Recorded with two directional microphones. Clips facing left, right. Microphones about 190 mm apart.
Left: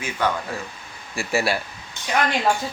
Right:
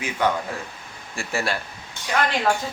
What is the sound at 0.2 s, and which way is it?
Speech, 20° right (ahead or behind).